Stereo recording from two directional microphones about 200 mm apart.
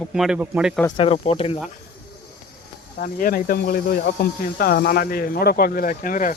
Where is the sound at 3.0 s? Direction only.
45° left (ahead or behind).